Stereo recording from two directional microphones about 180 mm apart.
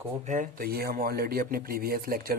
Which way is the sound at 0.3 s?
50° right (ahead or behind).